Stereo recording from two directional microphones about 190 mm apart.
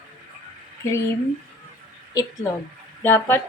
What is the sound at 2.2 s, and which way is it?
A woman's voice, 20° left (ahead or behind).